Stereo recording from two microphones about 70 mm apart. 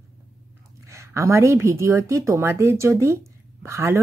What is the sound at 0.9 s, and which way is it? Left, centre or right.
Speech, right.